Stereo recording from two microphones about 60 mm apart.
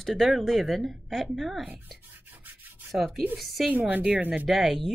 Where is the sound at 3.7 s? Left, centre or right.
Right.